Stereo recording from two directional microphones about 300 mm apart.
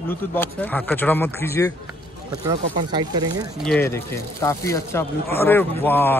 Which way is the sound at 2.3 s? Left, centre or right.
Centre.